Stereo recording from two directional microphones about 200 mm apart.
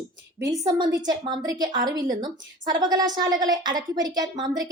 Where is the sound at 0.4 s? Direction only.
20° right (ahead or behind).